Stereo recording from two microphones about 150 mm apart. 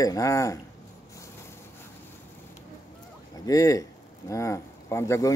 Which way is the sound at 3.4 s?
20° left (ahead or behind).